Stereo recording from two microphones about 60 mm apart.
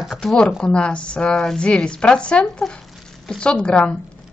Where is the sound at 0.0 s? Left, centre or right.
Centre.